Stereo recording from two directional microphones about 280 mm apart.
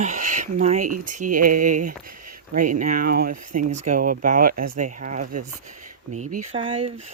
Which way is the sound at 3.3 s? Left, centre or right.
Right.